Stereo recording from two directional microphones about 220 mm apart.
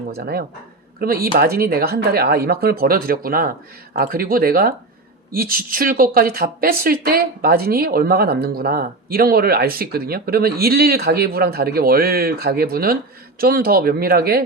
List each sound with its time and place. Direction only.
0.9 s speech: 45° right (ahead or behind)